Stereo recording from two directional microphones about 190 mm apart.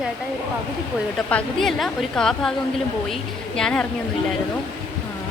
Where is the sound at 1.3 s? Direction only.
5° left (ahead or behind).